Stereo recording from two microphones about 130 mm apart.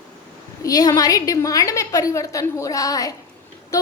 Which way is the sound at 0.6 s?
25° left (ahead or behind).